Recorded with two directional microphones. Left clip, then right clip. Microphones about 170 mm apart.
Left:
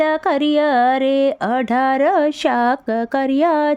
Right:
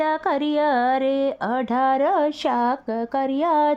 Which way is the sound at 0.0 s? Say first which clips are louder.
Left 5 dB; 20° left (ahead or behind).